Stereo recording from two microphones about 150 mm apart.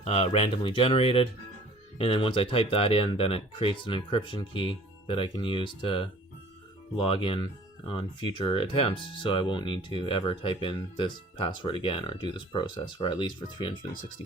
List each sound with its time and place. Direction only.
0.0 s speech: 45° left (ahead or behind)